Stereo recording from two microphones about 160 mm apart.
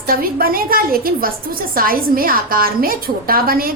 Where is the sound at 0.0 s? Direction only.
65° right (ahead or behind).